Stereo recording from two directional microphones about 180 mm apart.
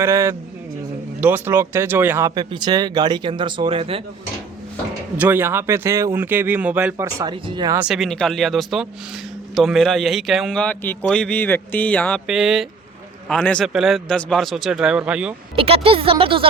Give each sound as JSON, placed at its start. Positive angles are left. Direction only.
{"t": 0.0, "sound": "speech", "side_deg": -15}
{"t": 5.1, "sound": "speech", "side_deg": -10}
{"t": 7.8, "sound": "speech", "side_deg": 0}
{"t": 15.5, "sound": "speech", "side_deg": -30}